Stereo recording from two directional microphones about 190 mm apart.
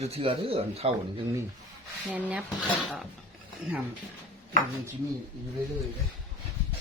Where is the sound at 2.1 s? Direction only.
5° right (ahead or behind).